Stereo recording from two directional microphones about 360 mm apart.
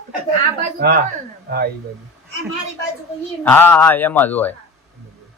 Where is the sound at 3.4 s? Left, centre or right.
Centre.